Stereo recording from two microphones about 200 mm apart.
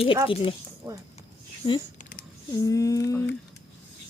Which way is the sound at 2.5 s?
15° left (ahead or behind).